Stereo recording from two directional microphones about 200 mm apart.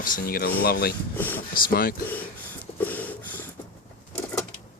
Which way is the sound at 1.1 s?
10° left (ahead or behind).